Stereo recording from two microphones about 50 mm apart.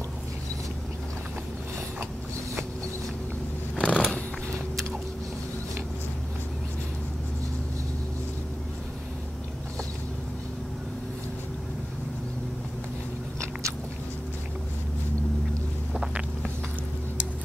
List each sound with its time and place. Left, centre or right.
3.7 s scissors: centre
13.4 s biting: right
15.9 s boat: centre